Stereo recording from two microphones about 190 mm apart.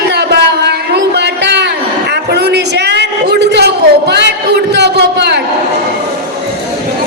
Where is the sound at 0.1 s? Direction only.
60° right (ahead or behind).